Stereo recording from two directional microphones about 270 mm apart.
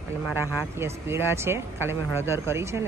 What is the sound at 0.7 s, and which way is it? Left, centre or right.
Speech, centre.